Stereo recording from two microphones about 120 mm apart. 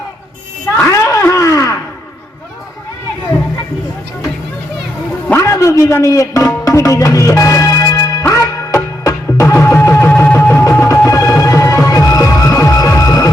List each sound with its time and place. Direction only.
0.9 s a sound: 25° left (ahead or behind)
5.3 s speech: 25° left (ahead or behind)
8.2 s music: 25° left (ahead or behind)